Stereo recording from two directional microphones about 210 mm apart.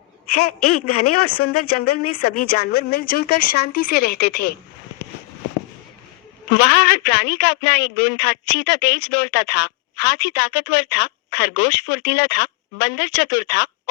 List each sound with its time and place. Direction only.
0.3 s speech: 90° left
2.3 s speech: 45° left (ahead or behind)
6.6 s speech: 50° left (ahead or behind)